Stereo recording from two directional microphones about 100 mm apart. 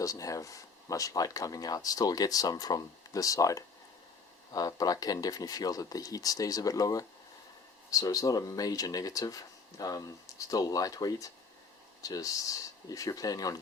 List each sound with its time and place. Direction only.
0.0 s speech: 35° left (ahead or behind)